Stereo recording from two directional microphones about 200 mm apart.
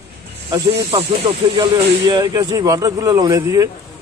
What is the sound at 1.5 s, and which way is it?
A man's voice, 20° right (ahead or behind).